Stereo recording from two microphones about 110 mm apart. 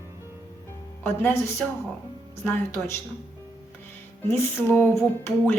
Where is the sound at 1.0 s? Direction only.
20° left (ahead or behind).